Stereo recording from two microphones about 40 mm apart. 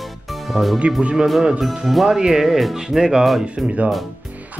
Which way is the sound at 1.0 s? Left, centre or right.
Right.